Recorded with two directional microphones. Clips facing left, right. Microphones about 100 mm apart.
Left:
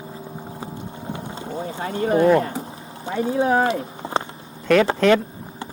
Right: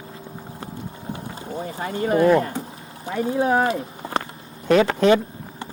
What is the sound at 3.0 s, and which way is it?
Speech, 25° left (ahead or behind).